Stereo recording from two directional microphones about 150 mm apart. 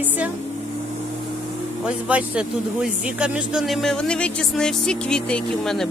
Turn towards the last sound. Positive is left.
turn(degrees=5)  # may be behind; listen again after turning